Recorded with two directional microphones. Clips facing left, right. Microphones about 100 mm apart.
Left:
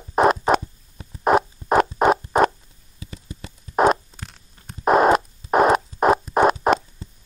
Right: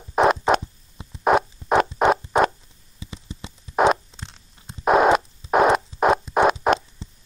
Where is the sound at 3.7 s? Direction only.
Centre (ahead or behind).